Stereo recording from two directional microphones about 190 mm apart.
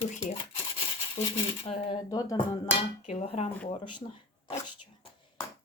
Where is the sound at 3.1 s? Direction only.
35° left (ahead or behind).